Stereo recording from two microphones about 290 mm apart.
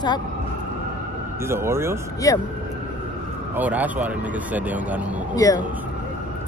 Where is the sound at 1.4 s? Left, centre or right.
Centre.